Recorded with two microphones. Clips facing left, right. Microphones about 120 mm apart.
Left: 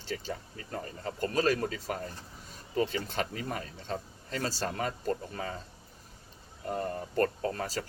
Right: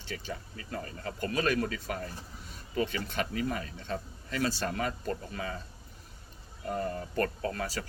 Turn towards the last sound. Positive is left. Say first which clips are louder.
# left 1 dB
turn(degrees=40)  # may be behind; listen again after turning